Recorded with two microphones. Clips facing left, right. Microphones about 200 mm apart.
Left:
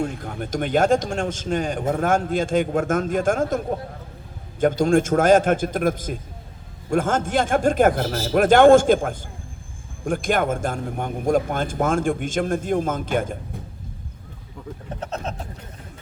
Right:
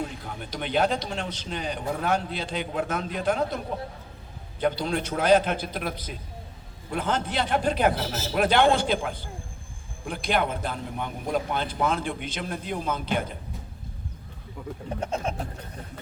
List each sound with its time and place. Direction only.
0.0 s a man's voice: 50° left (ahead or behind)
15.0 s speech: 10° right (ahead or behind)